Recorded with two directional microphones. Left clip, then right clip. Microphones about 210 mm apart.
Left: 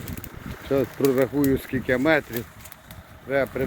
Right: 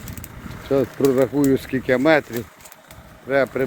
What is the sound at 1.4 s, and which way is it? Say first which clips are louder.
Speech: right 4 dB; 10° right (ahead or behind).